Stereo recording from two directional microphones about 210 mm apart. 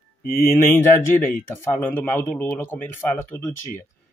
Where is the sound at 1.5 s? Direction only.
10° left (ahead or behind).